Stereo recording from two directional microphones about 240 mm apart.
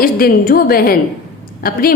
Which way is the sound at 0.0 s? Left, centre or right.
Left.